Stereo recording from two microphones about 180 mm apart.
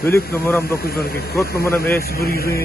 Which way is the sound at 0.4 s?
15° left (ahead or behind).